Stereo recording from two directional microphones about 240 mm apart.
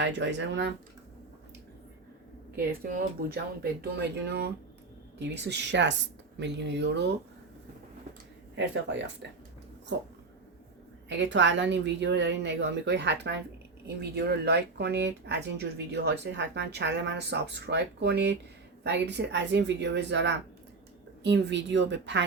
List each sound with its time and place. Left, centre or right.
0.0 s speech: right
2.6 s speech: right
8.5 s speech: right
11.1 s speech: right